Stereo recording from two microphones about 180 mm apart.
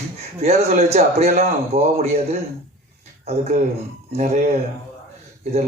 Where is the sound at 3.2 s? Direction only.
35° right (ahead or behind).